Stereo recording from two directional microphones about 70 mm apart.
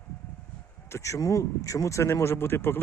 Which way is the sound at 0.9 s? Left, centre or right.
Left.